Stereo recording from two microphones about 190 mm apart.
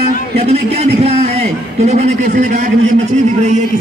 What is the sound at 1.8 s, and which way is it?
A man's voice, 35° right (ahead or behind).